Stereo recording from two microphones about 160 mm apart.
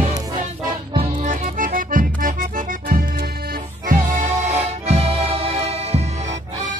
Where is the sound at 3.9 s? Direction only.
55° right (ahead or behind).